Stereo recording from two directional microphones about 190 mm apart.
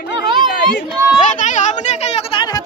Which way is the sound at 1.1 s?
40° left (ahead or behind).